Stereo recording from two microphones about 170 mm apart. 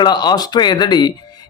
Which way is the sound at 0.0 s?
25° left (ahead or behind).